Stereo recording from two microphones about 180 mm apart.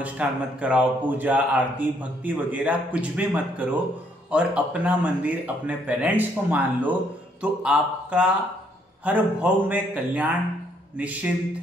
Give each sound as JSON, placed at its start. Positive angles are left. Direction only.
{"t": 0.0, "sound": "speech", "side_deg": -5}